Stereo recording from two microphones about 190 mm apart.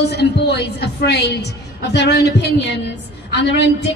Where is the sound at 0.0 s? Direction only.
60° left (ahead or behind).